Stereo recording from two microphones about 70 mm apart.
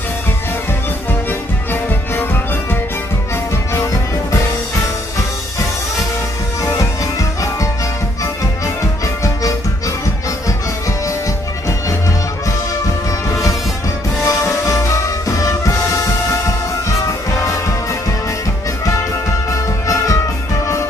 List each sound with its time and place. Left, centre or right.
3.7 s music: left
6.6 s music: left
13.3 s music: left